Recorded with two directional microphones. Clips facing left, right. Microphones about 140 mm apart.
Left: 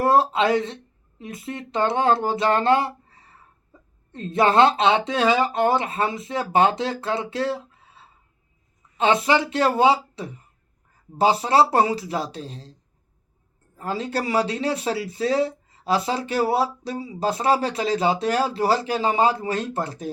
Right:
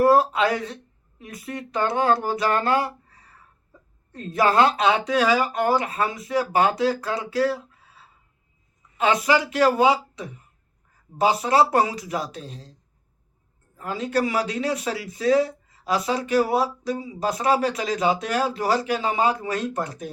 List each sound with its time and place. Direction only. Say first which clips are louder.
0.0 s speech: right 1 dB; 25° left (ahead or behind)
13.7 s speech: right 2 dB; 30° left (ahead or behind)